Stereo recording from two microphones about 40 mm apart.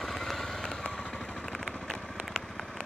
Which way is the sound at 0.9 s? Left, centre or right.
Centre.